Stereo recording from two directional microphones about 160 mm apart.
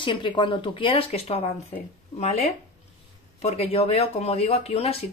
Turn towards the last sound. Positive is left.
turn(degrees=40)  # may be behind; listen again after turning